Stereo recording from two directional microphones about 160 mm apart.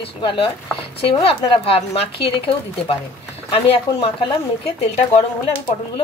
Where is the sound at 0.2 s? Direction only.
30° left (ahead or behind).